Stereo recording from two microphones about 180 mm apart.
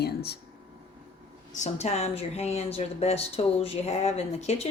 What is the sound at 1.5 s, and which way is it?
Speech, 40° left (ahead or behind).